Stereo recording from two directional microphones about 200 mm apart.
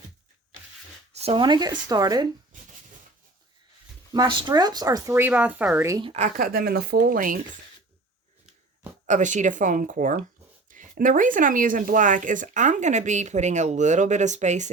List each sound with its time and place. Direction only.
1.1 s speech: 30° right (ahead or behind)
4.1 s speech: 20° right (ahead or behind)
6.1 s speech: 35° right (ahead or behind)
9.0 s speech: 40° right (ahead or behind)